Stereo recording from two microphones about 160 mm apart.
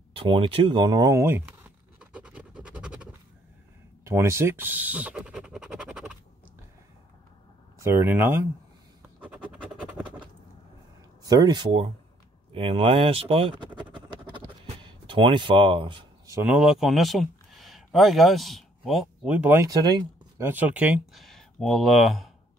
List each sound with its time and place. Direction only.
0.1 s a sound: 30° right (ahead or behind); by 3.2 s 5° right (ahead or behind)
4.0 s scratch: 15° right (ahead or behind)
7.8 s speech: 15° right (ahead or behind)
9.2 s scratch: 5° right (ahead or behind)
11.2 s speech: 25° right (ahead or behind)
12.5 s a sound: 35° right (ahead or behind)
16.4 s speech: 5° right (ahead or behind)
19.7 s speech: 25° right (ahead or behind)
20.3 s speech: 10° right (ahead or behind)